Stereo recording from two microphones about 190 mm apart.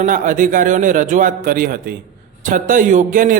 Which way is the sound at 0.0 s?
45° right (ahead or behind).